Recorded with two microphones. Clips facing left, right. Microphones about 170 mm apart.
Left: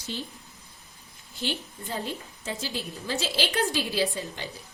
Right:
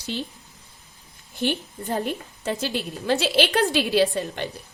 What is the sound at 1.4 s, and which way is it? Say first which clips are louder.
A woman's voice: right 7 dB; 55° right (ahead or behind).